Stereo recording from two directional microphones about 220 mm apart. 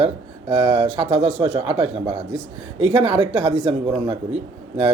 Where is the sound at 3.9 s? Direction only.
15° right (ahead or behind).